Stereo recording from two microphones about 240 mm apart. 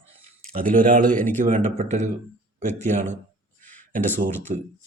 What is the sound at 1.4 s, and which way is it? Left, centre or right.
Speech, right.